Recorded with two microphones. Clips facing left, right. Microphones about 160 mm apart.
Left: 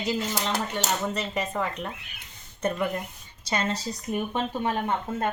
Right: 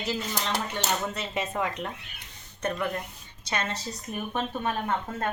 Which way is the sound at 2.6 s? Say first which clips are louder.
Left 2 dB; 10° left (ahead or behind).